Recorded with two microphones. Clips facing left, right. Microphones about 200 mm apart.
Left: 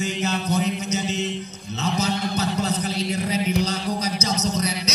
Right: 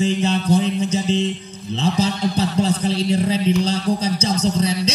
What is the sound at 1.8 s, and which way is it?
A man's voice, 30° right (ahead or behind).